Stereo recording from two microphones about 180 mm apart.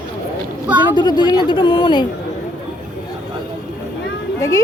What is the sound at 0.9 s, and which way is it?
Speech, 25° left (ahead or behind).